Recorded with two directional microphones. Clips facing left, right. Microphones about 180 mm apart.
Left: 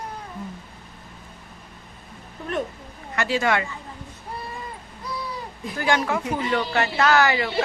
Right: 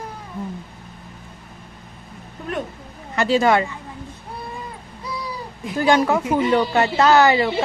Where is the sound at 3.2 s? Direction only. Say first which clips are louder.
Right 6 dB; 30° right (ahead or behind).